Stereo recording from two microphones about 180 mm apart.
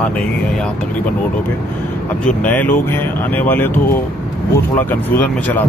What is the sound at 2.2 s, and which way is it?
Speech, 10° left (ahead or behind).